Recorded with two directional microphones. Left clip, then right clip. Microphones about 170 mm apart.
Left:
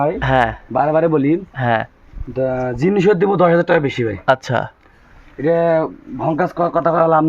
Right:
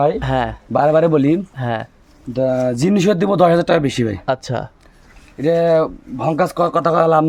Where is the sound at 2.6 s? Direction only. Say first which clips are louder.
Even; 90° right.